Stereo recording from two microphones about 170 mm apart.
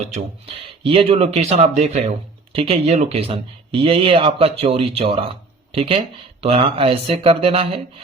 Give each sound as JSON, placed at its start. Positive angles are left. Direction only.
{"t": 0.1, "sound": "speech", "side_deg": -35}